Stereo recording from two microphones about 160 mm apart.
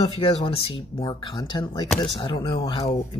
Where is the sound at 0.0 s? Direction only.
30° left (ahead or behind).